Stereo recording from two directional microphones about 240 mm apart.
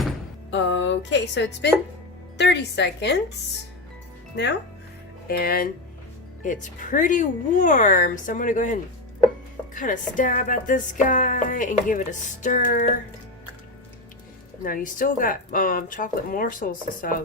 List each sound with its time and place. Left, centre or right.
0.5 s a woman's voice: left
5.3 s speech: left
14.6 s speech: left